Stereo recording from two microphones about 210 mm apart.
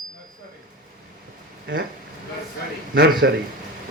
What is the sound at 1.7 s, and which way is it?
Speech, 60° right (ahead or behind).